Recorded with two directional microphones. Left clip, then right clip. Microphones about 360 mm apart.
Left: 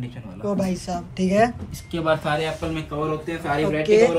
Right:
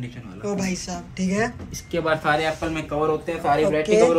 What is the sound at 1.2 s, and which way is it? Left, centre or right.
Speech, left.